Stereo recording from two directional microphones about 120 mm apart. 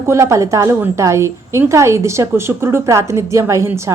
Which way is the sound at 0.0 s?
25° right (ahead or behind).